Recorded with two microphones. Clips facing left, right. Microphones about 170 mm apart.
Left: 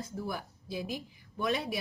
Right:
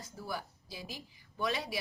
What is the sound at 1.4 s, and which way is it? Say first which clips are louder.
Speech: left 3 dB; 20° left (ahead or behind).